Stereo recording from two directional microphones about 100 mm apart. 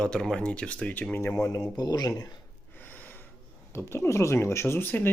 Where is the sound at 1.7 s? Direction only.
40° left (ahead or behind).